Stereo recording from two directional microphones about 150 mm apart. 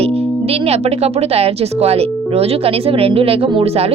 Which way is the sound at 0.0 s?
40° right (ahead or behind).